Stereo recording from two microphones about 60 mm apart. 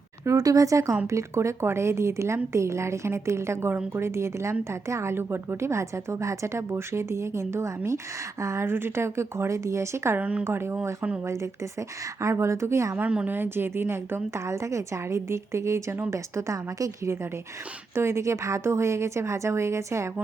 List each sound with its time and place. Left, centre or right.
0.3 s a woman's voice: right
10.2 s a woman's voice: right
10.4 s a woman's voice: right
11.3 s a woman's voice: right
13.0 s a woman's voice: right
13.3 s a woman's voice: right
17.9 s a woman's voice: right